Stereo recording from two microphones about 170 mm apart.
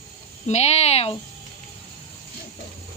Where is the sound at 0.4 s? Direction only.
40° left (ahead or behind).